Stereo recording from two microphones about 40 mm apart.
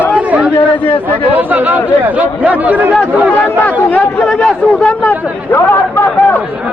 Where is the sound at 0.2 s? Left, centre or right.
Right.